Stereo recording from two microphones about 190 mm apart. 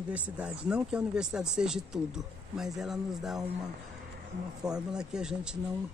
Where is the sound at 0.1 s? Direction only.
5° right (ahead or behind).